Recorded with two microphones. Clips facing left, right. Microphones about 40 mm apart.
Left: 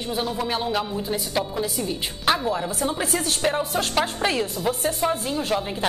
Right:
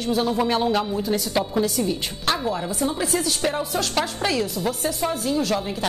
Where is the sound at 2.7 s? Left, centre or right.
Left.